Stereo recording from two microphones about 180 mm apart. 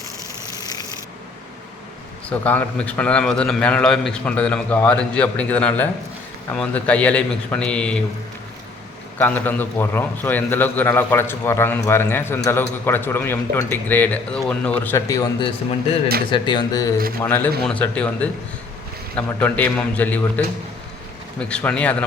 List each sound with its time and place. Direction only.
0.5 s rub: 20° left (ahead or behind)
2.3 s a man's voice: 10° left (ahead or behind)
9.1 s a man's voice: 10° left (ahead or behind)
17.2 s a man's voice: 10° left (ahead or behind)